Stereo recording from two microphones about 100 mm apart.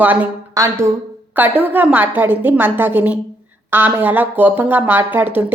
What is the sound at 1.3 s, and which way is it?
A woman's voice, 15° right (ahead or behind).